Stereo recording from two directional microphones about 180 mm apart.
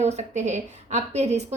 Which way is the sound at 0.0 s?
40° right (ahead or behind).